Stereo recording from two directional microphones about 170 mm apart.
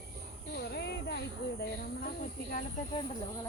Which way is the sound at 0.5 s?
70° left (ahead or behind).